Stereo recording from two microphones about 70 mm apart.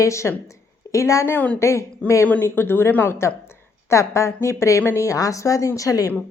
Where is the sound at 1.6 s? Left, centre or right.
Left.